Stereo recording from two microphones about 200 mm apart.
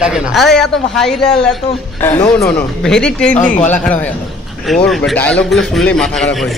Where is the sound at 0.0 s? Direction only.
5° right (ahead or behind).